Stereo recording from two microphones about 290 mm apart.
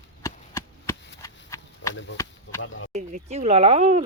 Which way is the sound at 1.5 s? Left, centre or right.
Centre.